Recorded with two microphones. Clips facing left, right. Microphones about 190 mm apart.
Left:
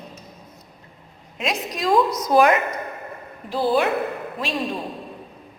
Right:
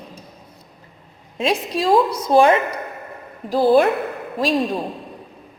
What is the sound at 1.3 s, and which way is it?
A woman's voice, 30° right (ahead or behind).